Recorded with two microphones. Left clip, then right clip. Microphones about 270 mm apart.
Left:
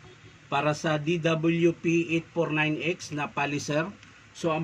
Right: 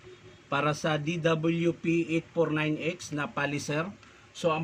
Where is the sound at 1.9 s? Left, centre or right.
Left.